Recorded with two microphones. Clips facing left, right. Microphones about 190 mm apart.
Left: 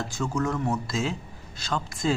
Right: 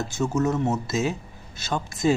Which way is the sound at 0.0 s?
20° right (ahead or behind).